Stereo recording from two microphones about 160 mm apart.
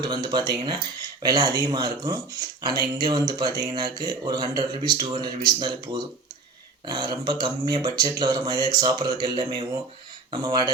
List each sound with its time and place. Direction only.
0.0 s speech: 25° right (ahead or behind)